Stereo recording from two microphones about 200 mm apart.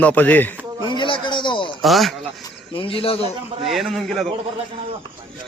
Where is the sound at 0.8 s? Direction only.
25° left (ahead or behind).